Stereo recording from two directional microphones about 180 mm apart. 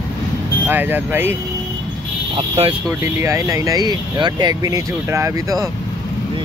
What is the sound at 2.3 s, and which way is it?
Speech, 30° right (ahead or behind).